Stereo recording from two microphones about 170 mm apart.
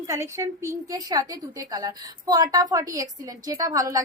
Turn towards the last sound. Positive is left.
turn(degrees=-20)  # may be behind; listen again after turning